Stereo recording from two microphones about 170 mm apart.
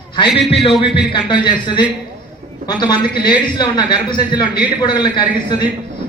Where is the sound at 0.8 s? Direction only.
30° left (ahead or behind).